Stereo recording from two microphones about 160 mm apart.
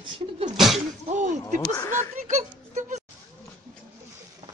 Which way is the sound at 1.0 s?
50° right (ahead or behind).